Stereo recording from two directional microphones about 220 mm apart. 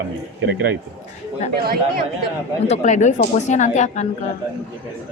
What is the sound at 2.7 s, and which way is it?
A woman's voice, 35° left (ahead or behind).